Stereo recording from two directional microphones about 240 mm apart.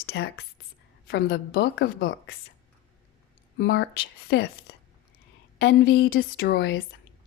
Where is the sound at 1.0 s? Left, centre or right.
Left.